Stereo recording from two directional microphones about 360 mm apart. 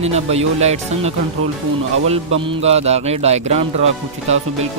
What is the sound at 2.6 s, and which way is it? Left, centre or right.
Speech, centre.